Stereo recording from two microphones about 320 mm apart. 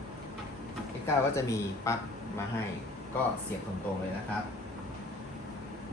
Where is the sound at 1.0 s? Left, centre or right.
Centre.